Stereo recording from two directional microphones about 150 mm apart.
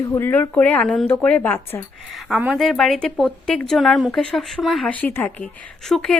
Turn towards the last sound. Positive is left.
turn(degrees=5)  # may be behind; listen again after turning